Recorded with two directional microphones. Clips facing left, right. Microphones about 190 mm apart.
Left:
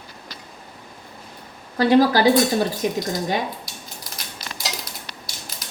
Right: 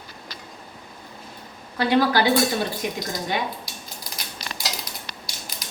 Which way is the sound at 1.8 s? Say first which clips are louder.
Left 4 dB; 40° left (ahead or behind).